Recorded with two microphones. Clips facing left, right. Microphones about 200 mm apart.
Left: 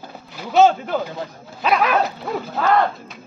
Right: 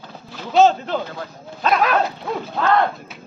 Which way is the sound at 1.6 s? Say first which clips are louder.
Even; 10° left (ahead or behind).